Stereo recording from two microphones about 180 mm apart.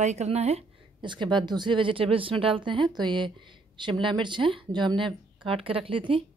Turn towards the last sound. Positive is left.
turn(degrees=-30)  # may be behind; listen again after turning